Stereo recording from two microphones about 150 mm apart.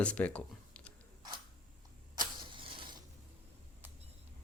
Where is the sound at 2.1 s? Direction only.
30° right (ahead or behind).